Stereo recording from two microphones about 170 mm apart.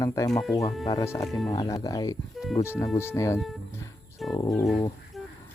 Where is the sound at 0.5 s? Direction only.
20° left (ahead or behind).